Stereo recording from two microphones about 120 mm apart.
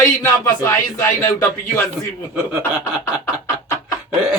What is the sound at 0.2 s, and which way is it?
Speech, 20° left (ahead or behind).